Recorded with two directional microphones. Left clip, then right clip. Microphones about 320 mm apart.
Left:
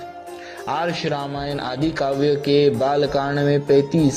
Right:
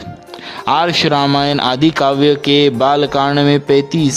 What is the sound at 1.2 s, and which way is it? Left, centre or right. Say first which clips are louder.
Speech: right 14 dB; right.